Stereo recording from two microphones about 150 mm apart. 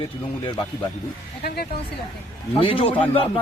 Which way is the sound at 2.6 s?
35° left (ahead or behind).